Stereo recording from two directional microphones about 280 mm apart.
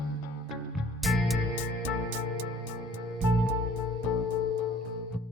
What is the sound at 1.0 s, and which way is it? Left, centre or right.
Music, centre.